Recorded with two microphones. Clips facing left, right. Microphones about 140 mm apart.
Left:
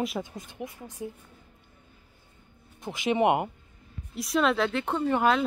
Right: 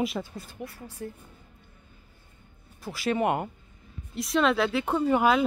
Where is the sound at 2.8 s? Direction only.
20° left (ahead or behind).